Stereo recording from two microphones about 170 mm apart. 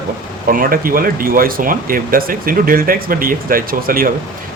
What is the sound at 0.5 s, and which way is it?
Speech, 55° right (ahead or behind).